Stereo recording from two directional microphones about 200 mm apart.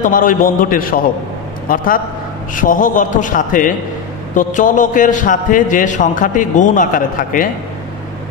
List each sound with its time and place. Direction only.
0.0 s a man's voice: 40° left (ahead or behind)
2.5 s a man's voice: 40° left (ahead or behind)